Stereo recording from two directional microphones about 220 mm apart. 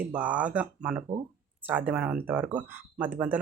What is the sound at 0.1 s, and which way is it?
Speech, 5° right (ahead or behind).